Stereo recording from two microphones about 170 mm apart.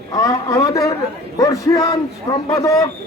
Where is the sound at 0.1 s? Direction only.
20° left (ahead or behind).